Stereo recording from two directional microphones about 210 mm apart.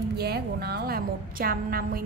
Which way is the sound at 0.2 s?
50° right (ahead or behind).